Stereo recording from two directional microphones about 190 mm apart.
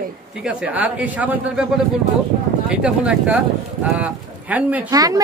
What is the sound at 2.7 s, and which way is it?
A woman's voice, 5° right (ahead or behind).